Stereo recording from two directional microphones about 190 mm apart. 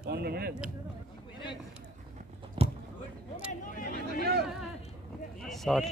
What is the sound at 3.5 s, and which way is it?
Vehicle, 45° left (ahead or behind).